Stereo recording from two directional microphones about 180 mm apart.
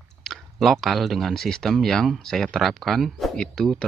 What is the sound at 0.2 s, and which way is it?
Speech, centre (ahead or behind).